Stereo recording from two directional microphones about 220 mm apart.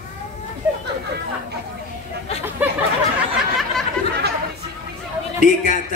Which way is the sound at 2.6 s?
10° right (ahead or behind).